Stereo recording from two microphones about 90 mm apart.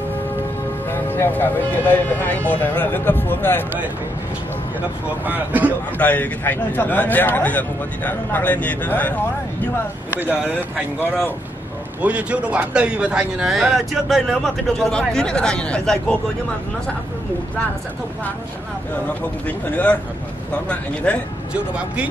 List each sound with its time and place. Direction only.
1.0 s speech: 25° left (ahead or behind)
5.2 s speech: 20° right (ahead or behind)
5.9 s a man's voice: 15° left (ahead or behind)
12.0 s a man's voice: 15° right (ahead or behind); by 16.2 s 10° left (ahead or behind)
19.4 s a man's voice: 15° left (ahead or behind)